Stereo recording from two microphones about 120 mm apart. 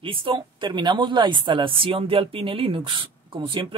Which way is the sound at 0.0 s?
45° right (ahead or behind).